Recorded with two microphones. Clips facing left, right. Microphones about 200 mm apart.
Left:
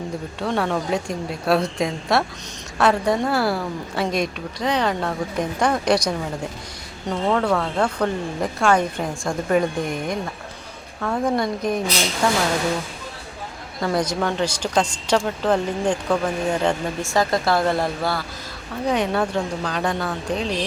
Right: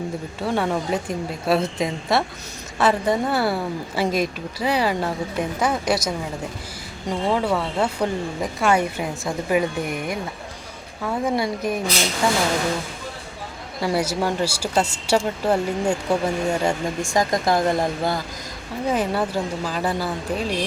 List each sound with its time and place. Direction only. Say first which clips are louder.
0.3 s a woman's voice: even; centre (ahead or behind)
13.8 s speech: even; 10° right (ahead or behind)
18.9 s speech: left 1 dB; 5° right (ahead or behind)